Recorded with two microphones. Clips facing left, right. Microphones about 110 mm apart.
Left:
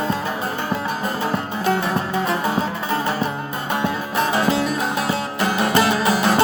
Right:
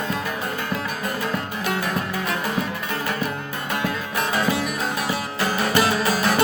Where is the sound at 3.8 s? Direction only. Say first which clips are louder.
Left 5 dB; 25° left (ahead or behind).